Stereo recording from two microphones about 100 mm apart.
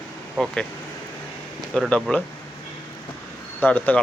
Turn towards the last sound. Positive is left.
turn(degrees=15)  # may be behind; listen again after turning